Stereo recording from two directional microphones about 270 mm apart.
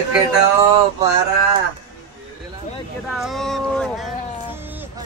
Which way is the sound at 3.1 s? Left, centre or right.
Centre.